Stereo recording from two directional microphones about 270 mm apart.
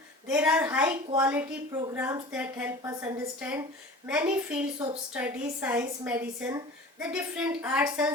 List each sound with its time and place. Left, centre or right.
0.3 s a woman's voice: centre